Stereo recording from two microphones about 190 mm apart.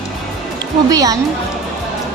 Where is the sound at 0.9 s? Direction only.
20° right (ahead or behind).